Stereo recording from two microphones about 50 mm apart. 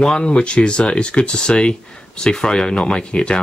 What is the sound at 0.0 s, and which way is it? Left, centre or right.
Speech, centre.